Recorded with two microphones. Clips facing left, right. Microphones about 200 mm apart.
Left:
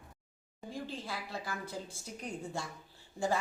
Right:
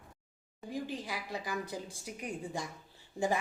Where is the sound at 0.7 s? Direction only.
15° right (ahead or behind).